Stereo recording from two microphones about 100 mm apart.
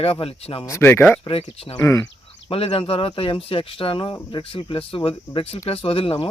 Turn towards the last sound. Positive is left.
turn(degrees=60)  # may be behind; listen again after turning